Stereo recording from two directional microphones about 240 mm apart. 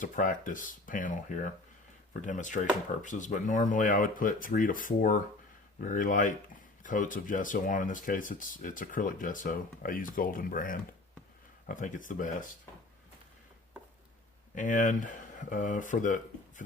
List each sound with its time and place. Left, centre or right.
0.0 s speech: left
14.5 s speech: left